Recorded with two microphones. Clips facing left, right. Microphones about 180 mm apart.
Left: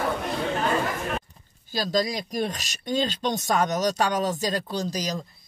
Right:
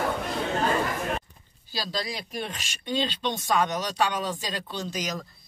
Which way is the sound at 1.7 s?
45° left (ahead or behind).